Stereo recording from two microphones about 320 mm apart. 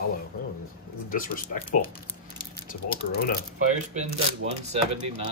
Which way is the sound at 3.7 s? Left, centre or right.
Right.